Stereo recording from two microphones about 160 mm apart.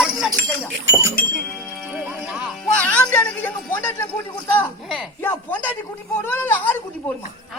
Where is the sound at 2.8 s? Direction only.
10° left (ahead or behind).